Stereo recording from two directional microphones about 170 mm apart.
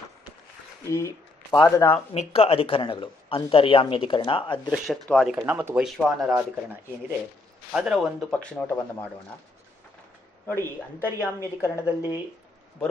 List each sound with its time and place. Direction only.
0.8 s speech: 15° left (ahead or behind)
2.1 s a man's voice: 35° left (ahead or behind)
5.0 s a woman's voice: 10° left (ahead or behind)
5.3 s speech: 10° right (ahead or behind)
7.7 s speech: 5° right (ahead or behind)
10.4 s a woman's voice: 15° left (ahead or behind)